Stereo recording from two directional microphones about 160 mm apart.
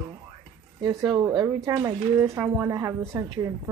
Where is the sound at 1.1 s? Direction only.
25° right (ahead or behind).